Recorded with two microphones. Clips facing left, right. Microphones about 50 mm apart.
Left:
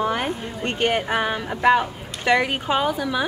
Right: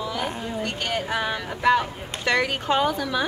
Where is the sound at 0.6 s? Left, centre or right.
Left; by 3.3 s centre.